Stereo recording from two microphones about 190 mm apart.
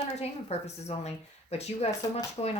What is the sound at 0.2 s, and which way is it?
Speech, 35° left (ahead or behind).